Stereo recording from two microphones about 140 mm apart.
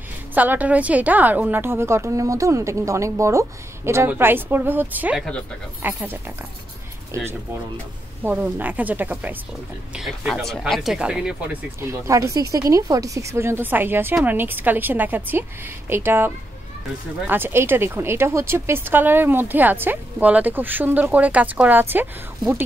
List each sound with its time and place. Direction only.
0.3 s a woman's voice: 10° right (ahead or behind)
9.9 s speech: centre (ahead or behind)
11.8 s a woman's voice: 20° right (ahead or behind)